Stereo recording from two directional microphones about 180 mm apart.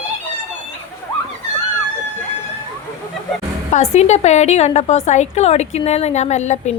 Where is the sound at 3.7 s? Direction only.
35° left (ahead or behind).